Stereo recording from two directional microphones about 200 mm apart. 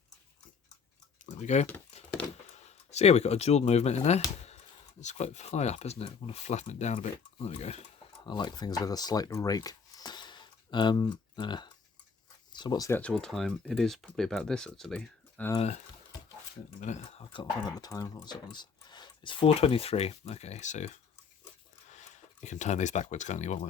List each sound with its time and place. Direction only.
1.2 s tick-tock: 35° left (ahead or behind)
2.5 s speech: 35° left (ahead or behind)
8.3 s speech: 20° left (ahead or behind)
13.0 s speech: 5° left (ahead or behind)
15.5 s speech: 35° left (ahead or behind)
16.8 s speech: 35° left (ahead or behind)